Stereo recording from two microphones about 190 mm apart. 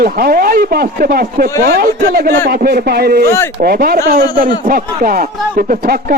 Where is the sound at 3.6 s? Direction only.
50° right (ahead or behind).